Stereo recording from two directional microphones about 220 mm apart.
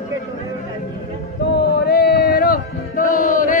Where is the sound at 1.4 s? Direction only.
50° left (ahead or behind).